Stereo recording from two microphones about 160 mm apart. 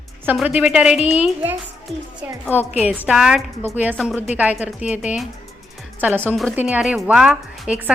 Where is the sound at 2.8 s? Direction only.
10° right (ahead or behind).